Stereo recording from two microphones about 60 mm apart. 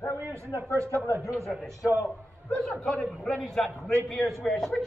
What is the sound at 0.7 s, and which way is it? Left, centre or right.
Speech, right.